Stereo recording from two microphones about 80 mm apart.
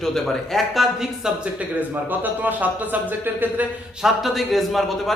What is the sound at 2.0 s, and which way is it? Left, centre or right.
Speech, right.